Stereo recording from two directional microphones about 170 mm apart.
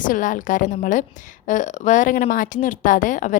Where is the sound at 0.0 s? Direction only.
50° left (ahead or behind).